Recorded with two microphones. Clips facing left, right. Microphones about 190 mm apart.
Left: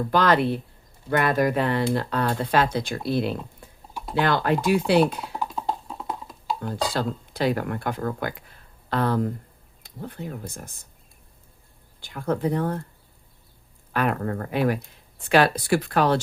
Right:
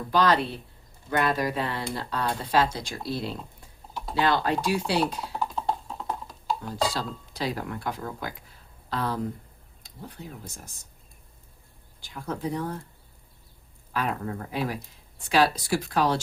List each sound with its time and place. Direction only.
0.1 s speech: 55° left (ahead or behind)
5.4 s music: centre (ahead or behind)
6.6 s speech: 55° left (ahead or behind)
12.0 s speech: 55° left (ahead or behind)
13.9 s speech: 60° left (ahead or behind)